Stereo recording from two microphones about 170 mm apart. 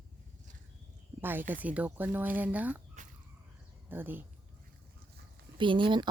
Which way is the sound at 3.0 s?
45° right (ahead or behind).